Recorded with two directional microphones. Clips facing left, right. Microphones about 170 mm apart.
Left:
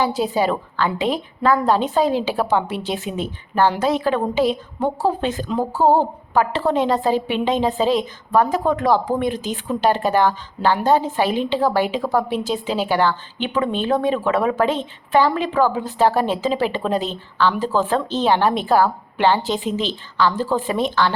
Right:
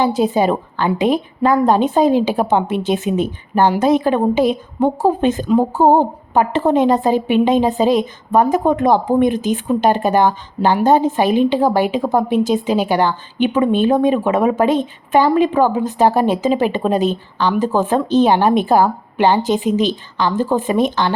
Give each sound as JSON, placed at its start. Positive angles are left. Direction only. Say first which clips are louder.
{"t": 0.0, "sound": "a woman's voice", "louder": "right 4 dB", "side_deg": -20}